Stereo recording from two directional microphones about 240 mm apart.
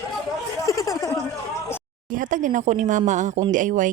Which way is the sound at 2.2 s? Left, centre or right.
Right.